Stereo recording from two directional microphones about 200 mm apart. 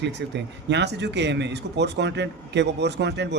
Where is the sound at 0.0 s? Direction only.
60° right (ahead or behind).